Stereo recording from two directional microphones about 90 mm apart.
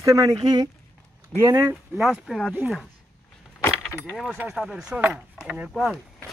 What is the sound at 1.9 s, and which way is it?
Speech, centre (ahead or behind).